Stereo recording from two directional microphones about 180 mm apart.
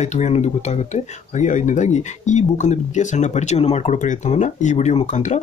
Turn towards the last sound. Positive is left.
turn(degrees=40)  # may be behind; listen again after turning